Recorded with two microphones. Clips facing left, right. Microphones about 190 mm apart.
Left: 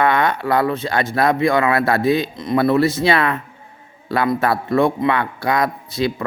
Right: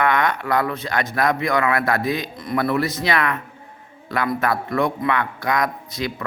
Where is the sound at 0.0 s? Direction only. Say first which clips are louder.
Left 3 dB; 30° left (ahead or behind).